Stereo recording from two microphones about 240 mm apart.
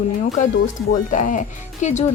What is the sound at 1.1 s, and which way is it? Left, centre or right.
Speech, left.